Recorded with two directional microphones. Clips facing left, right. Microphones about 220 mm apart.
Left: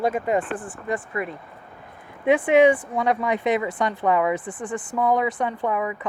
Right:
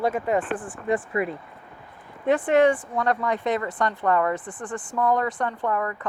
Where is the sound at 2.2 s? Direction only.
10° left (ahead or behind).